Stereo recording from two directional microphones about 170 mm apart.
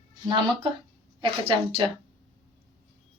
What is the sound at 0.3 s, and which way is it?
A woman's voice, 30° right (ahead or behind).